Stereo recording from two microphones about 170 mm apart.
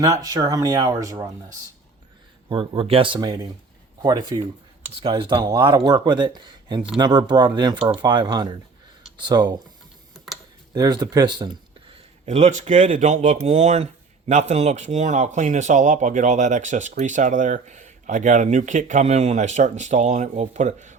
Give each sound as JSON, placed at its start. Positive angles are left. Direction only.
{"t": 0.0, "sound": "speech", "side_deg": -20}
{"t": 2.5, "sound": "speech", "side_deg": -30}
{"t": 10.8, "sound": "speech", "side_deg": -20}